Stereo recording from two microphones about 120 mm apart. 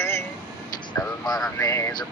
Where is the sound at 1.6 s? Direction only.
25° left (ahead or behind).